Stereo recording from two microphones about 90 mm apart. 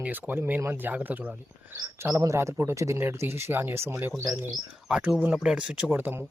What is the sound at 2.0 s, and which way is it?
Speech, 35° right (ahead or behind).